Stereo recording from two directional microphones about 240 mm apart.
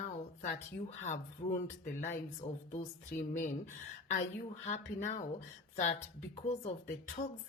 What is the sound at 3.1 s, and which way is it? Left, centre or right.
Speech, left.